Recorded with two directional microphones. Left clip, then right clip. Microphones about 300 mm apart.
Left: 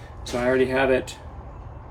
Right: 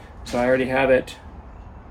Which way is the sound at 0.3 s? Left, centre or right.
Centre.